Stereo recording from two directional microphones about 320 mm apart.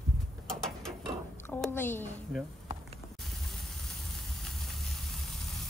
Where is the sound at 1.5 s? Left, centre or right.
Centre.